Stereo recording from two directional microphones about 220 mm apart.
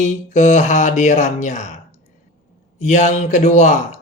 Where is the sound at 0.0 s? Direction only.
35° left (ahead or behind).